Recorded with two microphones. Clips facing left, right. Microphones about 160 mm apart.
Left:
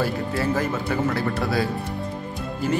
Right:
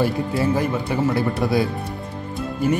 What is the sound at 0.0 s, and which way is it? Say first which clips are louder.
Speech: right 4 dB; 15° right (ahead or behind).